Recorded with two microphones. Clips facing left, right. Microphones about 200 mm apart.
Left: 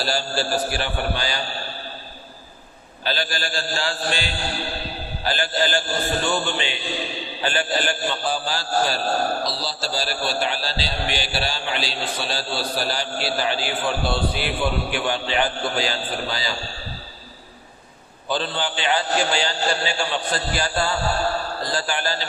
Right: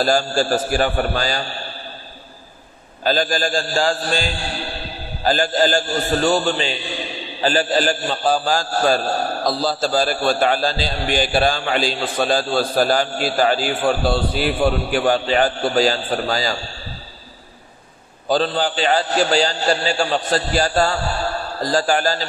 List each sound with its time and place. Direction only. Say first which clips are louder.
0.0 s a man's voice: right 7 dB; 45° right (ahead or behind)
3.0 s a man's voice: right 8 dB; 45° right (ahead or behind)
18.3 s a man's voice: right 7 dB; 40° right (ahead or behind)